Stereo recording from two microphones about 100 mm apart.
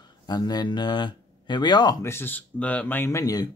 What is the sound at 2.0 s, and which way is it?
Speech, 25° left (ahead or behind).